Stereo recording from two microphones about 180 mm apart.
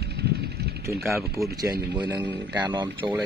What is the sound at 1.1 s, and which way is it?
A man's voice, 15° right (ahead or behind).